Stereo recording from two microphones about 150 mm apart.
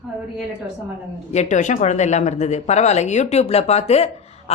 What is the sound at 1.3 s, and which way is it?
A woman's voice, 50° left (ahead or behind).